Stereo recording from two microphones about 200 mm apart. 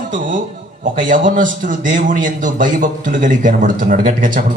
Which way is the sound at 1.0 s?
40° right (ahead or behind).